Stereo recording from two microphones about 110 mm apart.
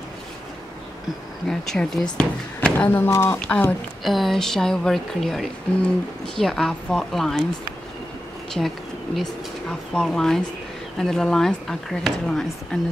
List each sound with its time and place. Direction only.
1.5 s a woman's voice: 5° left (ahead or behind)
4.0 s a woman's voice: centre (ahead or behind)
8.5 s a woman's voice: 5° left (ahead or behind)